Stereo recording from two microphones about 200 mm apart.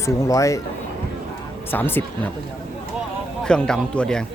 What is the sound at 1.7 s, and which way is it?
Speech, 10° left (ahead or behind).